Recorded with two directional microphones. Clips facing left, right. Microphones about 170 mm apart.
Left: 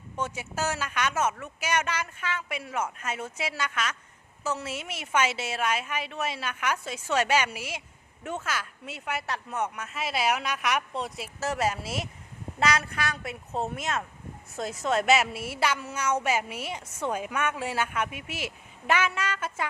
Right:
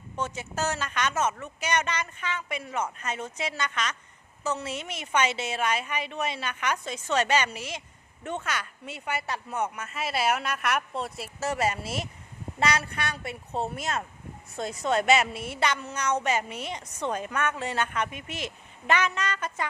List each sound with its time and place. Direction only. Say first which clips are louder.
0.2 s a woman's voice: even; 10° left (ahead or behind)